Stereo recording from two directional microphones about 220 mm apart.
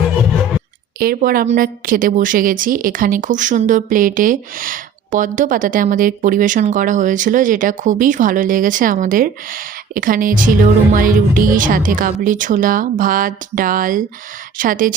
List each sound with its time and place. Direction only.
0.9 s a woman's voice: 45° right (ahead or behind)